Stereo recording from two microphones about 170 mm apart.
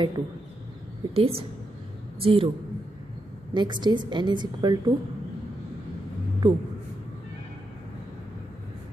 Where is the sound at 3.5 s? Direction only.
25° right (ahead or behind).